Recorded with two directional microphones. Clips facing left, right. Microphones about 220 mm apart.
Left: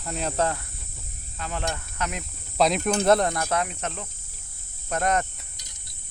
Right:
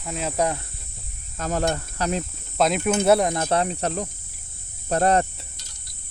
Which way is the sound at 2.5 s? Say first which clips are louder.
Right 1 dB; centre (ahead or behind).